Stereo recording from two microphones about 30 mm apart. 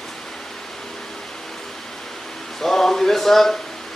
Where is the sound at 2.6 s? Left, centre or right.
Centre.